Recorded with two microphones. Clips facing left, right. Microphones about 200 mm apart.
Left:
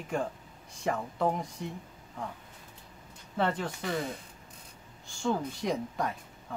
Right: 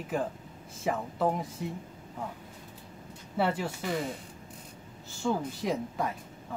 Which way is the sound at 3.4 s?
10° right (ahead or behind).